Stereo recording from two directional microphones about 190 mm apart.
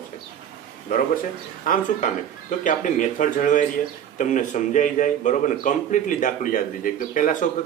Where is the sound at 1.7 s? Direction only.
45° left (ahead or behind).